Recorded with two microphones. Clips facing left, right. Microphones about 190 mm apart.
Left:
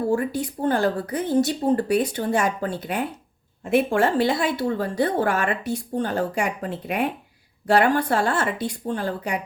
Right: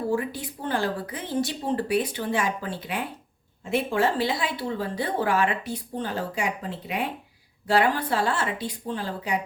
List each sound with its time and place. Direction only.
0.1 s speech: 45° left (ahead or behind)